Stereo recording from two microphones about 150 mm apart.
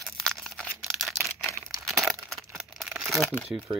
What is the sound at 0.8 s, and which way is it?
Camera, centre (ahead or behind).